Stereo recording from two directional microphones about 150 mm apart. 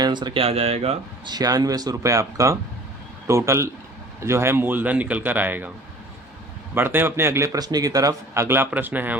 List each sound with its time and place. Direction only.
0.0 s speech: 30° right (ahead or behind)
1.2 s speech: 25° right (ahead or behind)
6.7 s speech: 15° right (ahead or behind)